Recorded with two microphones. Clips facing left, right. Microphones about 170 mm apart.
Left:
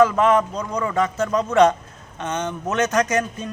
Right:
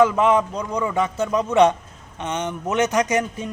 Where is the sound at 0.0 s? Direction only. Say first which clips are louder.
Even; 15° right (ahead or behind).